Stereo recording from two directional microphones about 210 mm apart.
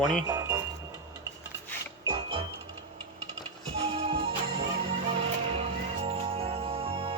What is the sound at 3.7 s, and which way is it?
Music, 30° right (ahead or behind).